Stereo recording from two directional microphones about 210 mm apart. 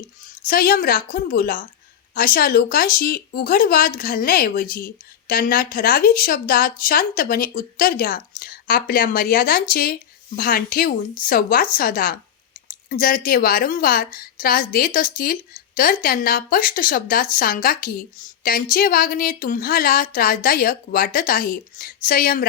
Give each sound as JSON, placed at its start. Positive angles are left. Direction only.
{"t": 0.4, "sound": "a woman's voice", "side_deg": 45}